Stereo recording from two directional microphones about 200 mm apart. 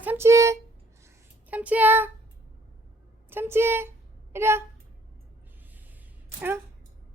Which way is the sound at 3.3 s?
10° right (ahead or behind).